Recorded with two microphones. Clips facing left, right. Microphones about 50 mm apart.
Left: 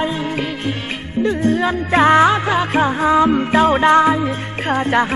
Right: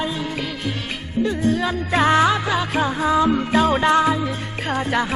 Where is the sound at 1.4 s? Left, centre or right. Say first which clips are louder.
Left 4 dB; left.